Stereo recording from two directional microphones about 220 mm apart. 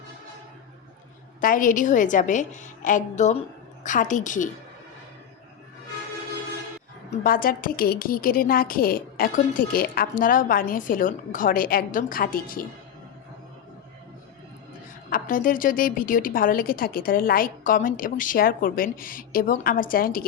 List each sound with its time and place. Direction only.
1.4 s a woman's voice: 40° left (ahead or behind)
7.3 s a woman's voice: 40° left (ahead or behind)
15.1 s a woman's voice: 40° left (ahead or behind)